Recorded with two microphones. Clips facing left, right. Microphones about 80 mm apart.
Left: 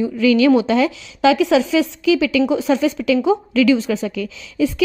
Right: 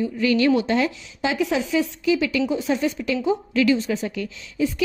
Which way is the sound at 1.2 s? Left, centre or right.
Left.